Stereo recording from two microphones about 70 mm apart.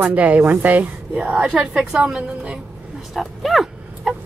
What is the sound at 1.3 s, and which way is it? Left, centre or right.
Speech, centre.